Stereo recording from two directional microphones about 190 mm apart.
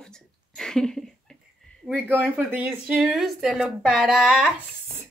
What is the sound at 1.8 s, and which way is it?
Speech, 10° right (ahead or behind).